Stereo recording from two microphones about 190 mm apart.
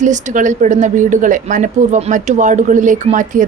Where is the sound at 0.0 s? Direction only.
40° right (ahead or behind).